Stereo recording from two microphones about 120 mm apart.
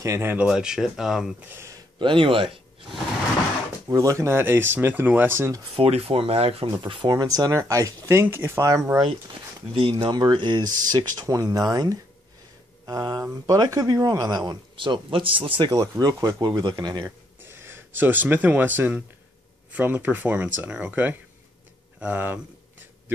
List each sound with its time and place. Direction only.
0.0 s speech: 20° right (ahead or behind)
0.5 s speech: 5° right (ahead or behind)
1.4 s speech: 20° right (ahead or behind)
2.0 s speech: 45° right (ahead or behind)
3.9 s speech: 25° right (ahead or behind)
5.8 s speech: 55° right (ahead or behind)
6.8 s speech: 40° right (ahead or behind)
9.8 s speech: 50° right (ahead or behind); by 12.0 s 35° right (ahead or behind)
12.8 s a sound: 35° right (ahead or behind)
13.2 s speech: 30° right (ahead or behind); by 15.7 s 45° right (ahead or behind)
15.7 s speech: 30° right (ahead or behind)
17.0 s speech: 20° right (ahead or behind)